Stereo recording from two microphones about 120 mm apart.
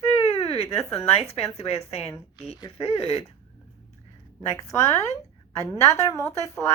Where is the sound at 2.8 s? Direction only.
55° left (ahead or behind).